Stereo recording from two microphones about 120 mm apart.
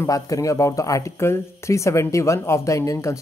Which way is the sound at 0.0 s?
30° left (ahead or behind).